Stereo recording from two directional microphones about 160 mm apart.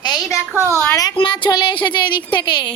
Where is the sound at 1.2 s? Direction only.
30° left (ahead or behind).